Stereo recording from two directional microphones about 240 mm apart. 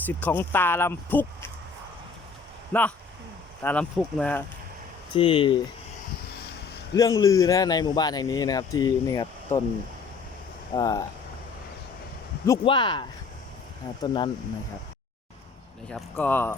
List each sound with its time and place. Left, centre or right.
0.0 s speech: centre
3.6 s speech: centre
5.1 s speech: left
6.9 s speech: centre
10.8 s speech: centre
12.5 s speech: centre
15.9 s speech: centre